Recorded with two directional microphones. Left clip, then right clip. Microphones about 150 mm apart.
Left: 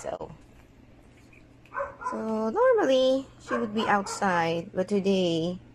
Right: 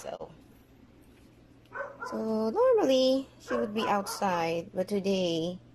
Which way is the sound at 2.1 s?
5° right (ahead or behind).